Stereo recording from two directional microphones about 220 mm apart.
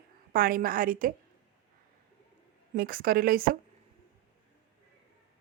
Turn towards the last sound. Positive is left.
turn(degrees=-40)  # may be behind; listen again after turning